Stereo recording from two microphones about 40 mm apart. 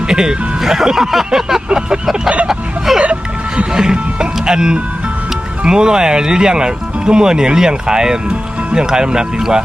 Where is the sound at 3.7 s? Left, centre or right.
Right.